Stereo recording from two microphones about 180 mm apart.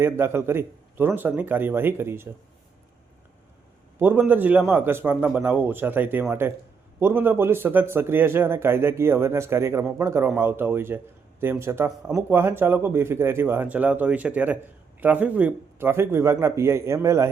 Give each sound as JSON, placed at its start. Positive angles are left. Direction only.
{"t": 0.0, "sound": "speech", "side_deg": -15}
{"t": 3.9, "sound": "speech", "side_deg": -10}